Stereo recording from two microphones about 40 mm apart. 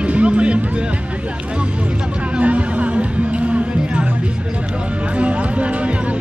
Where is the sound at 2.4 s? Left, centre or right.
Right.